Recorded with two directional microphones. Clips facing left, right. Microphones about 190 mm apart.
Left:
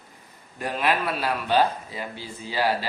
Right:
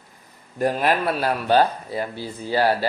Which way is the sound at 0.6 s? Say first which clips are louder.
Right 5 dB; 45° right (ahead or behind).